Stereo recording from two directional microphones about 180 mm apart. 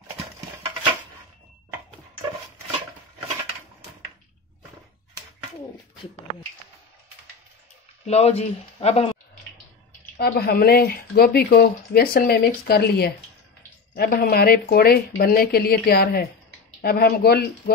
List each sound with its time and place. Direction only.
8.0 s speech: 35° left (ahead or behind)
10.1 s speech: 60° left (ahead or behind)